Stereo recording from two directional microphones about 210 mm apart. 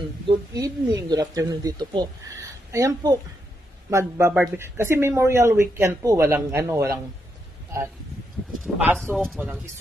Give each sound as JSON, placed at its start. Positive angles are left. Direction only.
{"t": 0.6, "sound": "speech", "side_deg": -15}
{"t": 8.7, "sound": "speech", "side_deg": 0}